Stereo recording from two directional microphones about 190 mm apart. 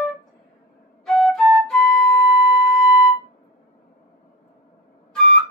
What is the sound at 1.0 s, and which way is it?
Flute, 5° left (ahead or behind).